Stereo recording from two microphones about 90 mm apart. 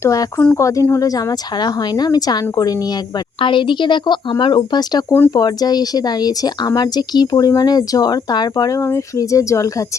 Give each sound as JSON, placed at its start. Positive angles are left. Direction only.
{"t": 0.0, "sound": "speech", "side_deg": 35}
{"t": 3.4, "sound": "speech", "side_deg": 65}
{"t": 8.8, "sound": "speech", "side_deg": 35}